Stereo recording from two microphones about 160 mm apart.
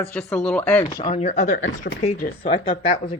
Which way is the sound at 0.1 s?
5° left (ahead or behind).